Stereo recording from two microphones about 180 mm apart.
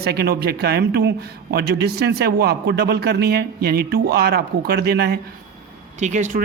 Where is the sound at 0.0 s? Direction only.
60° right (ahead or behind).